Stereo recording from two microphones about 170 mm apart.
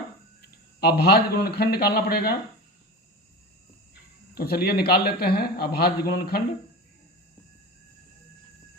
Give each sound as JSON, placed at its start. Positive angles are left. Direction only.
{"t": 0.9, "sound": "a man's voice", "side_deg": 70}
{"t": 4.4, "sound": "speech", "side_deg": 65}